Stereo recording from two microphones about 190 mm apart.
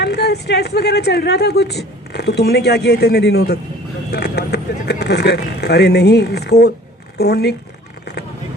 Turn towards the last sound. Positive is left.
turn(degrees=60)  # may be behind; listen again after turning